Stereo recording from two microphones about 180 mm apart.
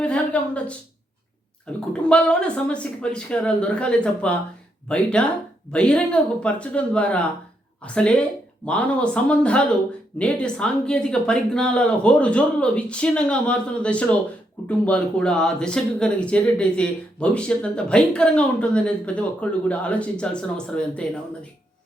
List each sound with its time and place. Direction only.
0.0 s speech: 5° left (ahead or behind)
1.9 s speech: 5° left (ahead or behind)